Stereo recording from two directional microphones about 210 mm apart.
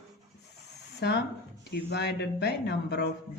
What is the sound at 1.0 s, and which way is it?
Speech, 50° left (ahead or behind).